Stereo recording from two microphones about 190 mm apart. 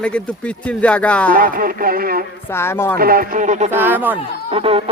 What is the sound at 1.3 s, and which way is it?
Speech, 45° right (ahead or behind).